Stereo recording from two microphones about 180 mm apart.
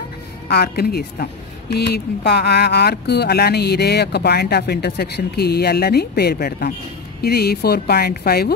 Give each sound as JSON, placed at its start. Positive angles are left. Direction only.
{"t": 0.5, "sound": "a woman's voice", "side_deg": 60}